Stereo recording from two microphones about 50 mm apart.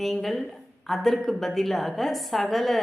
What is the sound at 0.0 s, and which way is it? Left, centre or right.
Speech, centre.